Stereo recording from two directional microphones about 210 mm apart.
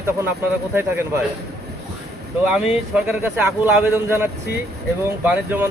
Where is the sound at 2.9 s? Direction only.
5° right (ahead or behind).